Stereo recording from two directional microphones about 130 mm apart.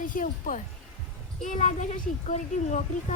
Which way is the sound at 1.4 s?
70° left (ahead or behind).